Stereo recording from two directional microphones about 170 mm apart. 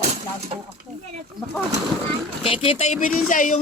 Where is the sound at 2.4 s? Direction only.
35° left (ahead or behind).